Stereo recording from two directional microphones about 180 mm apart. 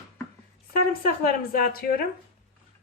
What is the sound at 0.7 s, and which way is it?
Speech, 55° left (ahead or behind).